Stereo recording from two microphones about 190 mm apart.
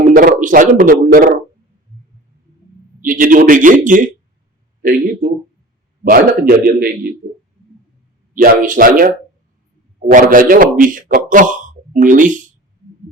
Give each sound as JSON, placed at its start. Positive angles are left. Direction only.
{"t": 0.1, "sound": "a man's voice", "side_deg": -45}
{"t": 3.0, "sound": "a man's voice", "side_deg": -45}
{"t": 8.3, "sound": "a man's voice", "side_deg": -45}